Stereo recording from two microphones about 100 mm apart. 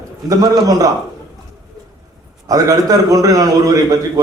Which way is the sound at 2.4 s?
35° right (ahead or behind).